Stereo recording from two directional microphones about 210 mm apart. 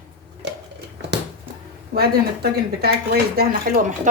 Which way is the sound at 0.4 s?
55° right (ahead or behind).